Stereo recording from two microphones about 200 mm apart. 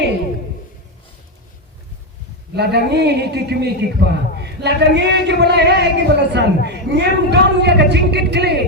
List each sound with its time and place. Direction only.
2.6 s a man's voice: 55° right (ahead or behind)